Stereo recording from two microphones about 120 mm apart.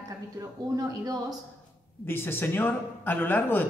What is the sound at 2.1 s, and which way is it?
A man's voice, 20° left (ahead or behind).